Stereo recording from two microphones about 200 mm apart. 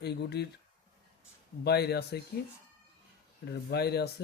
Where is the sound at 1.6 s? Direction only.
55° left (ahead or behind).